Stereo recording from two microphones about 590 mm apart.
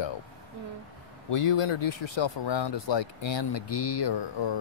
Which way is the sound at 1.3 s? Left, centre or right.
Left.